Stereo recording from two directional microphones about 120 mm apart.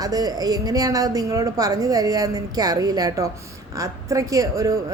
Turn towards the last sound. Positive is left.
turn(degrees=-30)  # may be behind; listen again after turning